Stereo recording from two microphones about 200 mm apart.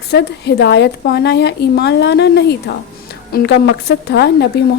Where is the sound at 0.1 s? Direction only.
55° left (ahead or behind).